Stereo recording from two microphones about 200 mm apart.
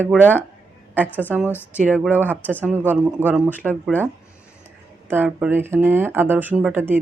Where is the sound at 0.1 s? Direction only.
10° left (ahead or behind).